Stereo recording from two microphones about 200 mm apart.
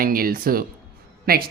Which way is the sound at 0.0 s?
45° right (ahead or behind).